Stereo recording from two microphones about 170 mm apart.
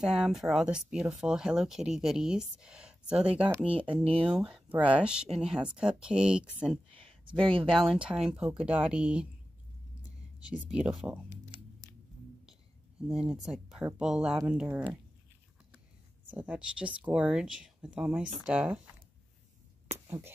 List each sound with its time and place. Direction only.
0.0 s speech: 5° right (ahead or behind)
6.9 s a sound: 30° right (ahead or behind)
7.4 s speech: 30° right (ahead or behind)
7.7 s speech: centre (ahead or behind)
10.5 s speech: 5° right (ahead or behind)
13.1 s speech: 5° right (ahead or behind)
16.3 s speech: 10° right (ahead or behind)
20.1 s speech: 15° right (ahead or behind)